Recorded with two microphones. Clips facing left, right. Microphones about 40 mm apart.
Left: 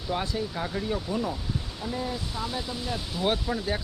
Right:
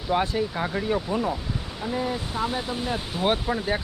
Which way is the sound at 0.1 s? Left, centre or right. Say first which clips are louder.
Right 6 dB; right.